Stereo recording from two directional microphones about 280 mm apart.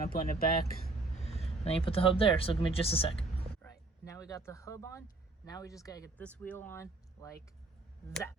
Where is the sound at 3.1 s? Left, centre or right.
Centre.